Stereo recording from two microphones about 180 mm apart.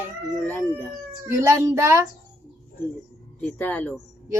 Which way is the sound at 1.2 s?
15° right (ahead or behind).